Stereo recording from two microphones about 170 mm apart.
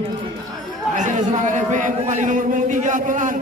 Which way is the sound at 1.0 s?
50° right (ahead or behind).